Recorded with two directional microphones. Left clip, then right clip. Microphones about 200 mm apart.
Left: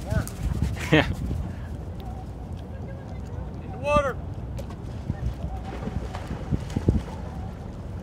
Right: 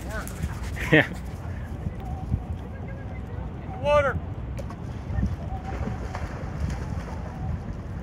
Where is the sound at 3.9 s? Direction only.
20° right (ahead or behind).